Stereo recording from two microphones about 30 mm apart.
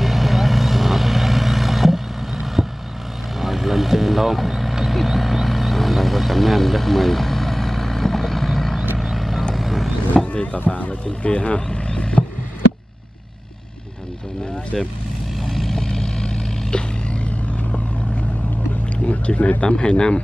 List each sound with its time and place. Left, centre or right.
0.0 s vehicle: centre
10.1 s a sound: left
10.8 s speech: left
14.5 s vehicle: left
15.4 s vehicle: centre
15.8 s vehicle: left
19.0 s a sound: left
19.6 s speech: left